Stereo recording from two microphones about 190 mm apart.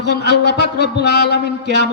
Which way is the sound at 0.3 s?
60° left (ahead or behind).